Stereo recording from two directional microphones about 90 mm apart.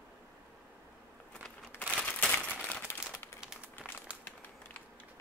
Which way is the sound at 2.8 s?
25° left (ahead or behind).